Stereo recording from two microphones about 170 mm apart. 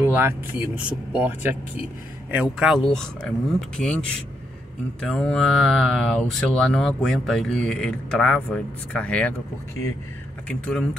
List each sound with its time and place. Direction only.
0.0 s speech: 15° right (ahead or behind); by 4.0 s 5° left (ahead or behind)
5.0 s speech: 5° left (ahead or behind)
10.5 s speech: 5° left (ahead or behind)